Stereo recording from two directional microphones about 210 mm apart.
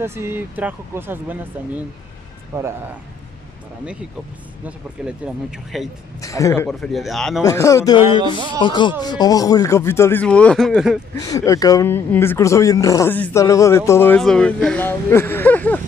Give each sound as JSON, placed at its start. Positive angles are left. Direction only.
{"t": 0.0, "sound": "speech", "side_deg": -10}
{"t": 4.6, "sound": "speech", "side_deg": -5}
{"t": 6.2, "sound": "speech", "side_deg": 15}
{"t": 6.7, "sound": "speech", "side_deg": 0}
{"t": 7.4, "sound": "speech", "side_deg": 15}
{"t": 8.4, "sound": "speech", "side_deg": -20}
{"t": 8.6, "sound": "speech", "side_deg": 20}
{"t": 11.1, "sound": "speech", "side_deg": 15}